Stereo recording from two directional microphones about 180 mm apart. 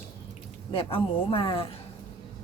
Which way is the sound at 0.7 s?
30° left (ahead or behind).